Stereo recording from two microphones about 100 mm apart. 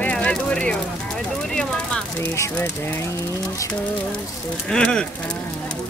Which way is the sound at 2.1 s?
30° left (ahead or behind).